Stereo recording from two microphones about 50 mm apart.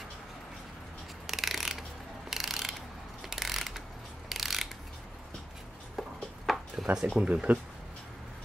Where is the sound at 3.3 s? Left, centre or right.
Centre.